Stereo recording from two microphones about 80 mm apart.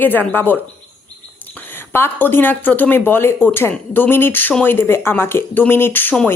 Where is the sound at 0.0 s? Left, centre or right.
Left.